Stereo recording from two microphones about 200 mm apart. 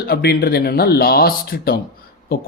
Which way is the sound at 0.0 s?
50° left (ahead or behind).